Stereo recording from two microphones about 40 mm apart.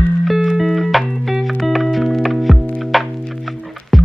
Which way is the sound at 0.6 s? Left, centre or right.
Centre.